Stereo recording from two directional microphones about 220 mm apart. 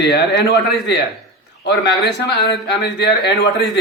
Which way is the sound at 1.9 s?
50° left (ahead or behind).